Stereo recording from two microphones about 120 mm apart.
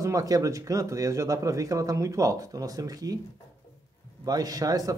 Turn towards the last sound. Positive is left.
turn(degrees=-30)  # may be behind; listen again after turning